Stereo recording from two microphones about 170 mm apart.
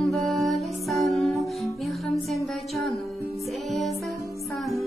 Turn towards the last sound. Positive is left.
turn(degrees=0)  # may be behind; listen again after turning